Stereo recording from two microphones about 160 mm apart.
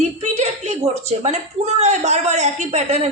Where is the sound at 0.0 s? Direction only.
45° right (ahead or behind).